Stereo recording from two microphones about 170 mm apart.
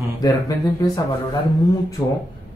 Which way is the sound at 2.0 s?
25° left (ahead or behind).